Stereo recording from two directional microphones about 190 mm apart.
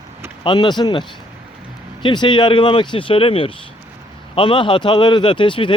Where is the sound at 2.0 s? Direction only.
25° left (ahead or behind).